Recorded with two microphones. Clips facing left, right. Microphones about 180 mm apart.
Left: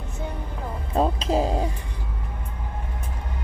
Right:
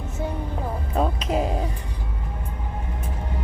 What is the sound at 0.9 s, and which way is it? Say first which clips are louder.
Speech: left 2 dB; 30° left (ahead or behind).